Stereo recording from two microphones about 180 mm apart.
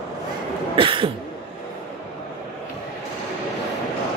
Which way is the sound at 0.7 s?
30° right (ahead or behind).